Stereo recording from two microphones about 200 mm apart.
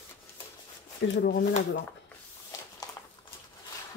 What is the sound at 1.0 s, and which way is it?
Speech, 60° left (ahead or behind).